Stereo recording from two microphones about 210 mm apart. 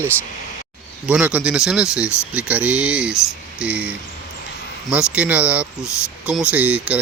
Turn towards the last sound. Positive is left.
turn(degrees=-5)  # may be behind; listen again after turning